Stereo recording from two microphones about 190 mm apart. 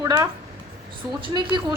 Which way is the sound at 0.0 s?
15° right (ahead or behind).